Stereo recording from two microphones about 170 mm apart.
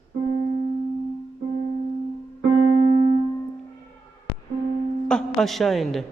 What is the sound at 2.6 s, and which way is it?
Music, 30° right (ahead or behind).